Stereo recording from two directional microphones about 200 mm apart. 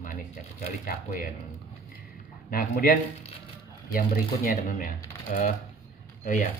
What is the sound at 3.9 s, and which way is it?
Speech, 45° left (ahead or behind).